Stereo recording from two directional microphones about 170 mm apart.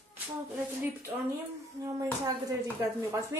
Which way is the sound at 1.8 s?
20° right (ahead or behind).